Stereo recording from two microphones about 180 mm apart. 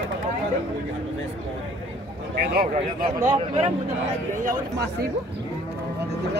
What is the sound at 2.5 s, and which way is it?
Speech, 55° right (ahead or behind).